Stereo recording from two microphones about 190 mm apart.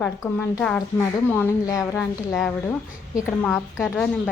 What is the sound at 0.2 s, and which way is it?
A woman's voice, 15° left (ahead or behind).